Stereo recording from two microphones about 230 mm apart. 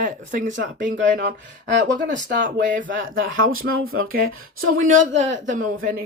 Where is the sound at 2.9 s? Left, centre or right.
Right.